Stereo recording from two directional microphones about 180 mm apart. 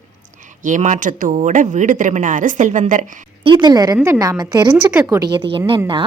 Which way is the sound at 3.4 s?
25° right (ahead or behind).